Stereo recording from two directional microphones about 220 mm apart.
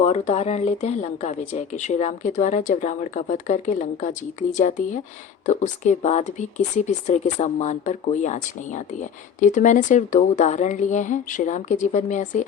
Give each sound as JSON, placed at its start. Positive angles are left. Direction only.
{"t": 0.0, "sound": "speech", "side_deg": 30}